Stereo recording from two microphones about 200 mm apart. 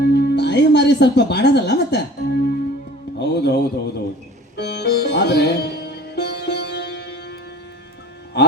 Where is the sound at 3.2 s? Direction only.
55° left (ahead or behind).